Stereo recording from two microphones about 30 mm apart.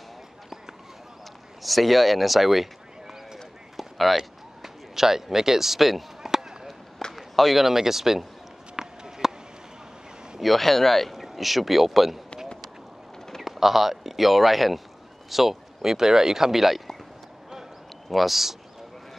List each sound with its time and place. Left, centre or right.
1.6 s speech: centre
3.7 s clip-clop: centre
4.6 s a man's voice: centre
8.7 s run: centre
10.4 s speech: centre
13.4 s speech: centre
18.1 s speech: centre